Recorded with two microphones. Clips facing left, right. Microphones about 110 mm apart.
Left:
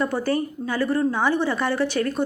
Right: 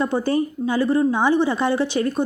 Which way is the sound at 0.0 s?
20° right (ahead or behind).